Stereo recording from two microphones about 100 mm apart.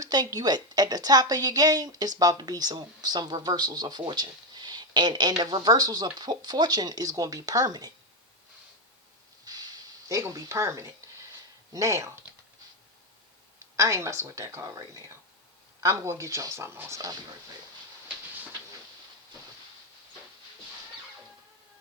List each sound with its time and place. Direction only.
0.0 s a woman's voice: 40° right (ahead or behind)
9.4 s a sound: 40° right (ahead or behind)
11.7 s a woman's voice: 30° right (ahead or behind)
13.7 s a woman's voice: 30° right (ahead or behind)